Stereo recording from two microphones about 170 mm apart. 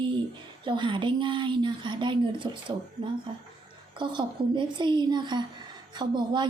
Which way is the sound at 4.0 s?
25° right (ahead or behind).